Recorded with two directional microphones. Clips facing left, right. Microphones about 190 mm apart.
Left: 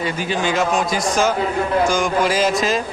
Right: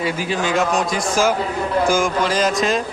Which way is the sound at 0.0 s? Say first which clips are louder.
Even; centre (ahead or behind).